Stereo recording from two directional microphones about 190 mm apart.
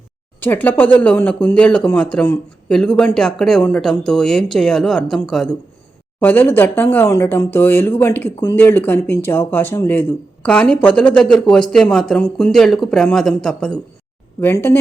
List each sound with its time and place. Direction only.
0.3 s speech: 10° left (ahead or behind)